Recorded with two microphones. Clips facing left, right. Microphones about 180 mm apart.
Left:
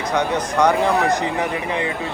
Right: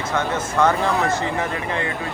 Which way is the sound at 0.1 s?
15° left (ahead or behind).